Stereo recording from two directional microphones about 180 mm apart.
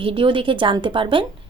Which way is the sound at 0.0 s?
30° right (ahead or behind).